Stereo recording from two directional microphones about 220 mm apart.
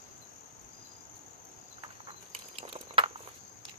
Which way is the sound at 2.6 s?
25° right (ahead or behind).